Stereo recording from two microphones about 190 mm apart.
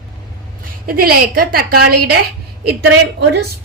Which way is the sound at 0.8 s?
50° right (ahead or behind).